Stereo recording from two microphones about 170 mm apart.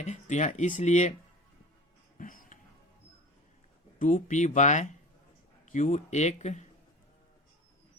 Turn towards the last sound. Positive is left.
turn(degrees=45)  # may be behind; listen again after turning